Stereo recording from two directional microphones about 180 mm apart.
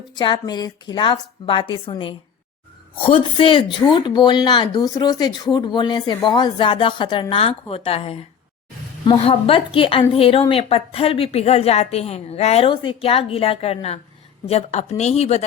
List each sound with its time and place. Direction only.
0.1 s a woman's voice: 25° left (ahead or behind)